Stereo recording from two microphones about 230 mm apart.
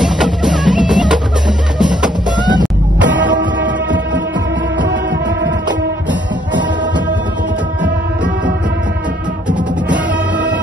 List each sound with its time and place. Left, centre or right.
0.0 s music: centre
3.3 s music: right